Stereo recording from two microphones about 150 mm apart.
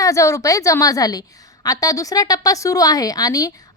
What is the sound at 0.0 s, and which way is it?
A woman's voice, 20° left (ahead or behind).